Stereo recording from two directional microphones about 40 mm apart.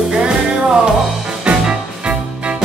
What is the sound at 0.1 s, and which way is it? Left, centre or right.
Music, centre.